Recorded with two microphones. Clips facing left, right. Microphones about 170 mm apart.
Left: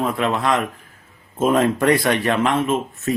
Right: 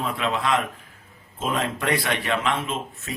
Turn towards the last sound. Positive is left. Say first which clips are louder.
# left 10 dB
turn(degrees=45)  # may be behind; listen again after turning